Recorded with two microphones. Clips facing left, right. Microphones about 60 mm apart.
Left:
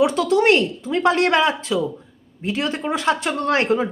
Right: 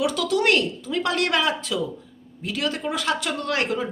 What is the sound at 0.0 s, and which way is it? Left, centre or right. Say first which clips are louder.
Speech: left 5 dB; left.